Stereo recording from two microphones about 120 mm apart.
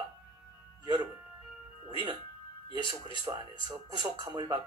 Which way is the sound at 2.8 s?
35° right (ahead or behind).